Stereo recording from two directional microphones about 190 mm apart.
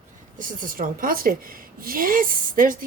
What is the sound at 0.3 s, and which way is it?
A woman's voice, 45° right (ahead or behind).